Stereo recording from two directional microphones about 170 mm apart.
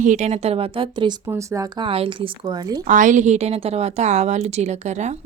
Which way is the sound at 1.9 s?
30° right (ahead or behind).